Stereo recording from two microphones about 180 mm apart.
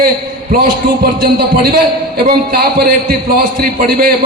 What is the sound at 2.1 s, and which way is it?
A man's voice, 55° right (ahead or behind).